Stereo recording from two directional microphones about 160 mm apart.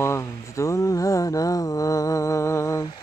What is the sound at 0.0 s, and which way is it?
Mantra, 20° left (ahead or behind).